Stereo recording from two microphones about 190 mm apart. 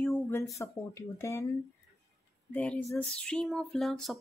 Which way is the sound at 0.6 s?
15° left (ahead or behind).